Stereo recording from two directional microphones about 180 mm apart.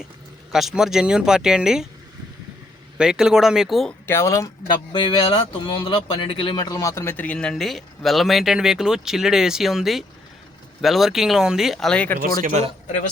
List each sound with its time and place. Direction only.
0.5 s a man's voice: centre (ahead or behind)
3.0 s a man's voice: 5° right (ahead or behind)
4.0 s a man's voice: 15° left (ahead or behind)
12.2 s speech: 45° right (ahead or behind)